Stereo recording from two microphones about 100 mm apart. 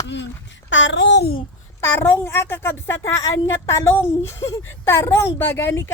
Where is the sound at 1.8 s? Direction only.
20° left (ahead or behind).